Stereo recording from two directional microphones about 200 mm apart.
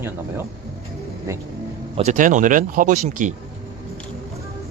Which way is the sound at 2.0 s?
40° right (ahead or behind).